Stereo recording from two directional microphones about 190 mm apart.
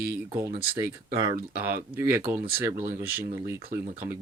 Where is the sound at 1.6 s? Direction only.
15° right (ahead or behind).